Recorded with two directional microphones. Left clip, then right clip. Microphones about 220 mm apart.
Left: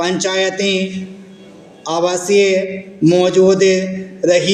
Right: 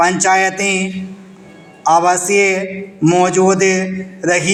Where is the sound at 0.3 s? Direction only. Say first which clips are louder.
Right 3 dB; 15° right (ahead or behind).